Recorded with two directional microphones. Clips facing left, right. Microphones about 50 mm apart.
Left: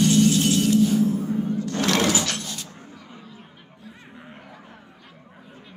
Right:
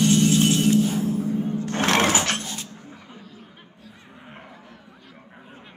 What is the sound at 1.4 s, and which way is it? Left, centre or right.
Sewing machine, right.